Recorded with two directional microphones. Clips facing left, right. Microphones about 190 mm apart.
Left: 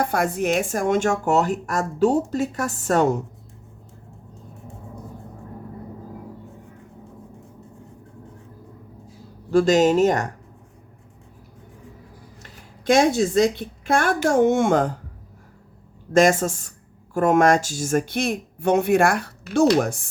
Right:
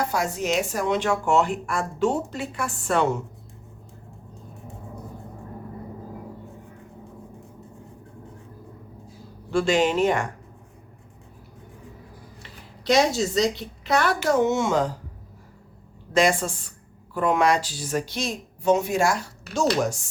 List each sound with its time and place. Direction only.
0.0 s speech: 55° left (ahead or behind)
9.5 s speech: 40° left (ahead or behind)
12.4 s a woman's voice: 50° left (ahead or behind)
16.1 s speech: 45° left (ahead or behind)